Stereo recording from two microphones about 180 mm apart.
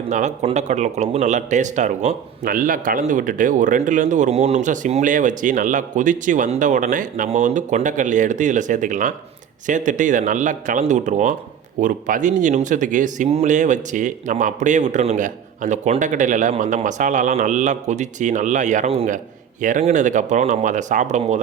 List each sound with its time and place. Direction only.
0.1 s speech: 40° right (ahead or behind)